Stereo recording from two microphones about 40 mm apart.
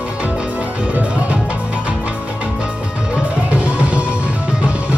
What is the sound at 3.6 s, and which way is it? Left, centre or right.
Music, right.